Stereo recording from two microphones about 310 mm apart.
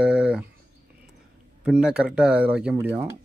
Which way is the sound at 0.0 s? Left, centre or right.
Centre.